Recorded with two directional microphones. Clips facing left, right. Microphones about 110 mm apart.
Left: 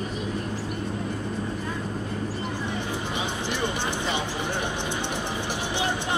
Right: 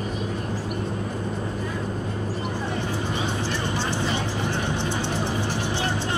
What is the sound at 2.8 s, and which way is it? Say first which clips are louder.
Music: right 2 dB; 15° left (ahead or behind).